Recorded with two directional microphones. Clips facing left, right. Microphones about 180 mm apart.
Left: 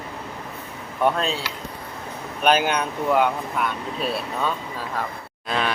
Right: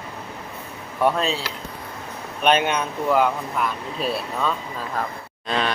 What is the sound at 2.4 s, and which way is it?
Speech, centre (ahead or behind).